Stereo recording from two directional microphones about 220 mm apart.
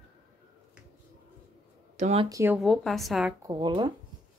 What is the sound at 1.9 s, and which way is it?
Speech, 30° right (ahead or behind).